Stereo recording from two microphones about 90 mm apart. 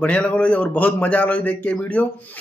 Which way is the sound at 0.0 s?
15° left (ahead or behind).